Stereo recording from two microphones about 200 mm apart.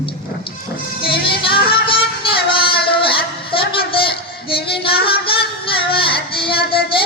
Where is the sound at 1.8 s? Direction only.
25° left (ahead or behind).